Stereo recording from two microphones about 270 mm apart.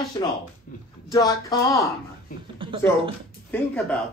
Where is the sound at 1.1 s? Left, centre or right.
Centre.